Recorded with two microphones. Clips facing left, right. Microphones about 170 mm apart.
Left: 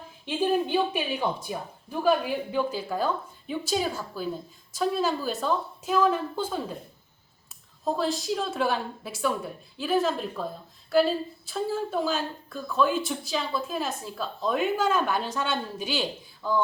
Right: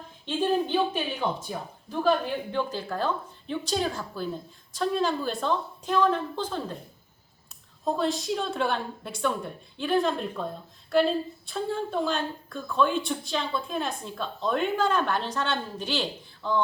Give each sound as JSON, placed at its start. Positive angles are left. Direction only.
{"t": 0.3, "sound": "a woman's voice", "side_deg": 10}
{"t": 7.9, "sound": "a woman's voice", "side_deg": 0}